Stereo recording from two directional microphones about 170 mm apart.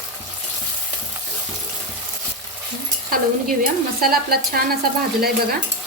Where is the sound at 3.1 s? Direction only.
55° right (ahead or behind).